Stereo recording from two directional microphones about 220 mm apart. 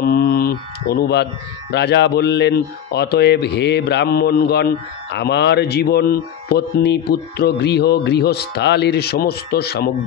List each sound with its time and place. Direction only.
0.0 s speech: 45° left (ahead or behind)